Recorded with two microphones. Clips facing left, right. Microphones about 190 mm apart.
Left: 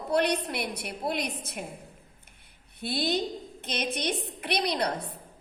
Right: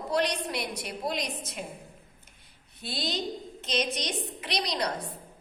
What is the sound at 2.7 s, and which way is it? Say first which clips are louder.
A woman's voice: left 5 dB; 55° left (ahead or behind).